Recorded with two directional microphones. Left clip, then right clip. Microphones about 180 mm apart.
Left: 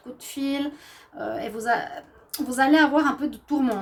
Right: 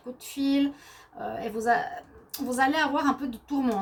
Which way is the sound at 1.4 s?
50° left (ahead or behind).